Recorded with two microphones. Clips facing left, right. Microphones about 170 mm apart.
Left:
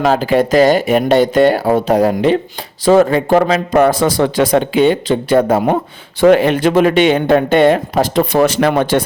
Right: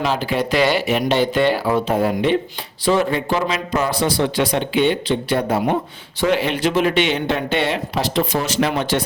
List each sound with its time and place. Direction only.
0.0 s speech: 45° left (ahead or behind)